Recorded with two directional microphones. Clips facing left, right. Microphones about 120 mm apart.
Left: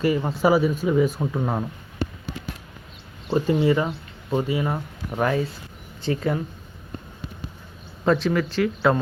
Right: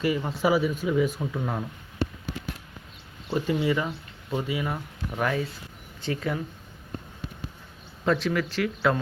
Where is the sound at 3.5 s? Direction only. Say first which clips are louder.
Left 5 dB; 35° left (ahead or behind).